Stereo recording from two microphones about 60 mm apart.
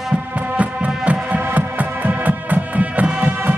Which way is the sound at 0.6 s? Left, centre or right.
Right.